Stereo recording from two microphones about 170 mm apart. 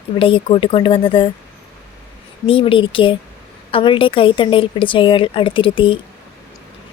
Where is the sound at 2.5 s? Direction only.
30° left (ahead or behind).